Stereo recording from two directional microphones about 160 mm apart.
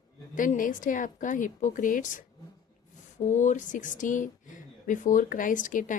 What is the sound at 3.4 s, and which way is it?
Speech, 50° left (ahead or behind).